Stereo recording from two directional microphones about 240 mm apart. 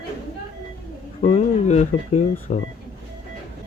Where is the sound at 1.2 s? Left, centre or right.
Left.